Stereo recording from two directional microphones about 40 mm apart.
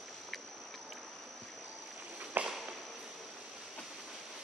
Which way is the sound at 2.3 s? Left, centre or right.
Right.